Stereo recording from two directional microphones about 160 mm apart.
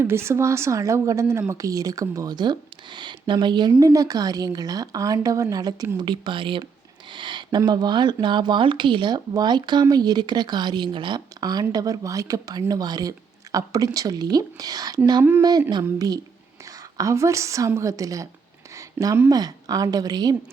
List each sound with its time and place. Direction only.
0.0 s speech: 15° right (ahead or behind)
15.2 s speech: 15° right (ahead or behind)
15.7 s a woman's voice: 25° right (ahead or behind)